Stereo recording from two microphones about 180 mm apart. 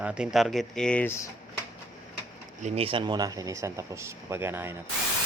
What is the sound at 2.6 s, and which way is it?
Speech, 30° right (ahead or behind).